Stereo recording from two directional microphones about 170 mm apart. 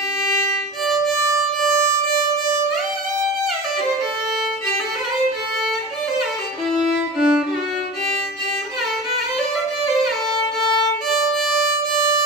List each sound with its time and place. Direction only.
7.2 s music: 5° right (ahead or behind)